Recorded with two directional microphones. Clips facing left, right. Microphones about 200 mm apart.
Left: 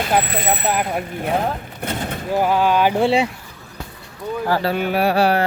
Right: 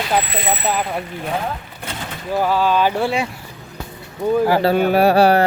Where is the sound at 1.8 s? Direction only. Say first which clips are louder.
Left 9 dB; 55° left (ahead or behind).